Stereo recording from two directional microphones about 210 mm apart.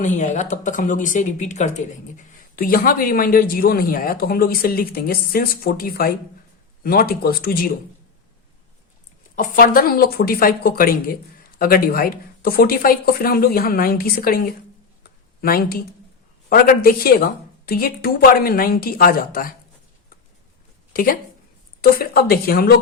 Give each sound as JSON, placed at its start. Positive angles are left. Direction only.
{"t": 0.0, "sound": "speech", "side_deg": 35}
{"t": 9.3, "sound": "speech", "side_deg": 40}
{"t": 20.9, "sound": "a woman's voice", "side_deg": 45}